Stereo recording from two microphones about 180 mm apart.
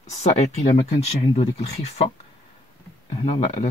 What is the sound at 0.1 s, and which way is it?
Speech, 35° left (ahead or behind).